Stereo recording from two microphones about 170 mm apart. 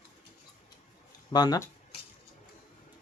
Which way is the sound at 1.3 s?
25° left (ahead or behind).